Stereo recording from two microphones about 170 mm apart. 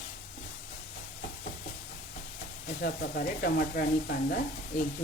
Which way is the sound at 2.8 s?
60° left (ahead or behind).